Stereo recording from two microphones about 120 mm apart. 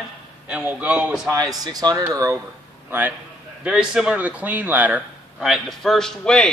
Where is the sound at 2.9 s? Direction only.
15° right (ahead or behind).